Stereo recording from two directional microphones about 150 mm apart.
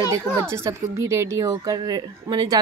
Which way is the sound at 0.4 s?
20° right (ahead or behind).